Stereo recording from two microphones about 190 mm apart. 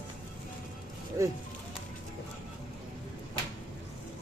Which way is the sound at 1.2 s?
15° right (ahead or behind).